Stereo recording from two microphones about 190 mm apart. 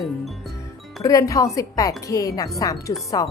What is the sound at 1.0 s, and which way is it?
A woman's voice, 20° left (ahead or behind).